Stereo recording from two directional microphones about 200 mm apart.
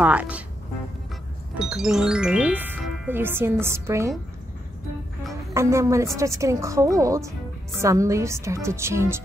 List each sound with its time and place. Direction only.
0.0 s a woman's voice: 5° right (ahead or behind)
1.6 s a woman's voice: centre (ahead or behind)
5.5 s a woman's voice: 15° right (ahead or behind)